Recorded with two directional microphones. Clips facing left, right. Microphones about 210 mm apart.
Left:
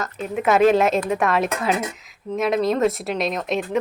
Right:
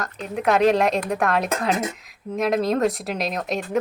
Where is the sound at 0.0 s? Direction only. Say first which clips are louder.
Left 1 dB; centre (ahead or behind).